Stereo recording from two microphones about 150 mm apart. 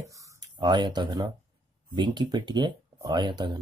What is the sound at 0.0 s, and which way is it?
Speech, 20° right (ahead or behind).